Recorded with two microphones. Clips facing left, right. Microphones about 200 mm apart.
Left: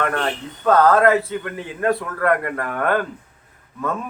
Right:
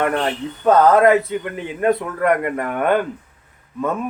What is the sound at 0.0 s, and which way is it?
Speech, 20° right (ahead or behind).